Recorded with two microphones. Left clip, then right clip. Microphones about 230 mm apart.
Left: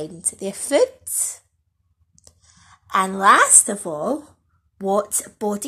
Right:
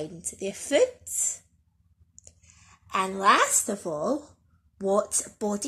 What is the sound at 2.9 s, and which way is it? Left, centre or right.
Speech, left.